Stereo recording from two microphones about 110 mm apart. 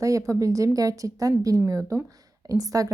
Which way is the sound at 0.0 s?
30° right (ahead or behind).